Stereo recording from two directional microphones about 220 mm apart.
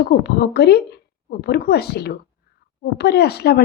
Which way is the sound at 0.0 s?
50° left (ahead or behind).